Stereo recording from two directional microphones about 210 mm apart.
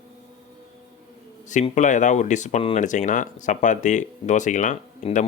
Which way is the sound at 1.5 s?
35° left (ahead or behind).